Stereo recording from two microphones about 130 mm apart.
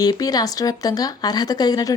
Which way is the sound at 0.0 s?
30° left (ahead or behind).